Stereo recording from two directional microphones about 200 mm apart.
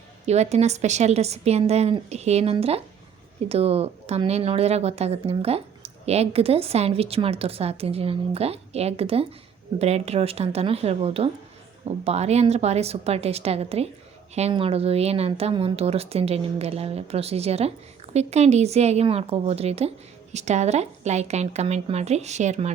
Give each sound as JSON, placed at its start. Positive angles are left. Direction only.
{"t": 0.3, "sound": "speech", "side_deg": -35}